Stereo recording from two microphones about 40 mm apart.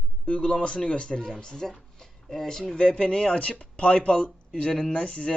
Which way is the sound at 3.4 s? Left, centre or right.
Left.